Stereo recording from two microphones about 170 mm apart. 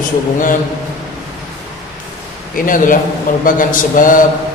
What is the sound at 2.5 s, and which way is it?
A man's voice, 50° left (ahead or behind).